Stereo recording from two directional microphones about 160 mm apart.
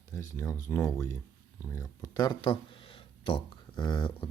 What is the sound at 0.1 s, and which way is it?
Speech, 15° left (ahead or behind).